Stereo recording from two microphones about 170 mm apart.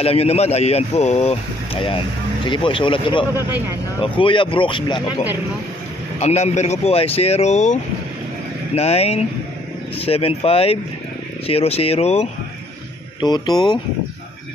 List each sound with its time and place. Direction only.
0.0 s speech: 35° left (ahead or behind)
6.1 s speech: 40° left (ahead or behind)
13.2 s speech: 25° left (ahead or behind)